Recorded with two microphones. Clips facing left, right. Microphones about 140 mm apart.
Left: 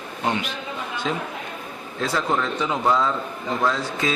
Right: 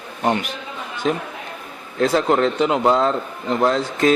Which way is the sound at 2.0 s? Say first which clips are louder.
Right 7 dB; 60° right (ahead or behind).